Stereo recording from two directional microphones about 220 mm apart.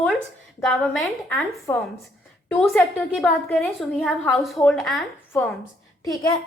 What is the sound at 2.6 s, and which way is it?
A woman's voice, centre (ahead or behind).